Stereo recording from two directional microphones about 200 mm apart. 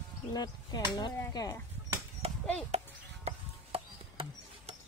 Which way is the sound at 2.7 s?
30° right (ahead or behind).